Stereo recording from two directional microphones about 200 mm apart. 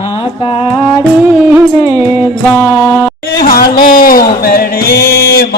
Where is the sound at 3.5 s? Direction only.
45° left (ahead or behind).